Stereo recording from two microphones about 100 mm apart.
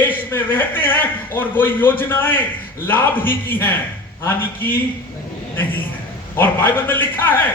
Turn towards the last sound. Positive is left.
turn(degrees=20)  # may be behind; listen again after turning